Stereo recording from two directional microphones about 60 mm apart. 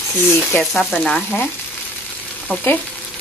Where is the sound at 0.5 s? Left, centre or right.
Left.